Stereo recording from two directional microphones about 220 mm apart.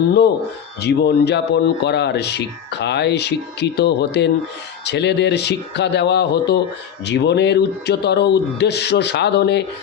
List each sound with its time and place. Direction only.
0.8 s speech: 50° left (ahead or behind)